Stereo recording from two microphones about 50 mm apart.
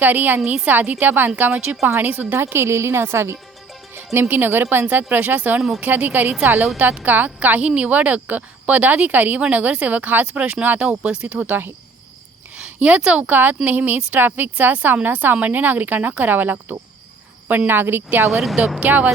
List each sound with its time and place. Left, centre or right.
0.0 s speech: right
2.4 s a woman's voice: right
3.9 s music: right
4.3 s a woman's voice: right
5.4 s speech: right
11.3 s speech: right
12.5 s a sound: right
13.1 s a woman's voice: right
18.8 s speech: right